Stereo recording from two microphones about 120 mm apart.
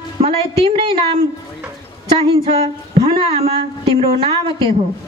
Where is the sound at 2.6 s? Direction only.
55° right (ahead or behind).